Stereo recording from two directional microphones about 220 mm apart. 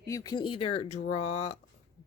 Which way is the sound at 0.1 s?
15° left (ahead or behind).